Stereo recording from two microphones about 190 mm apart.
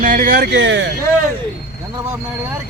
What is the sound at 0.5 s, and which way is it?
Speech, 75° right (ahead or behind).